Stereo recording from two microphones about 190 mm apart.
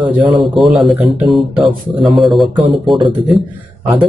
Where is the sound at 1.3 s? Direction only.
25° right (ahead or behind).